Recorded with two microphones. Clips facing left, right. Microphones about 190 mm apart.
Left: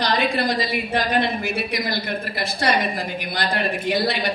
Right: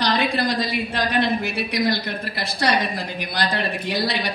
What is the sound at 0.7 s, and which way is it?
A woman's voice, 60° left (ahead or behind).